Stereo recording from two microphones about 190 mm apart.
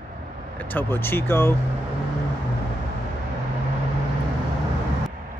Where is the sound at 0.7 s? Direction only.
10° left (ahead or behind).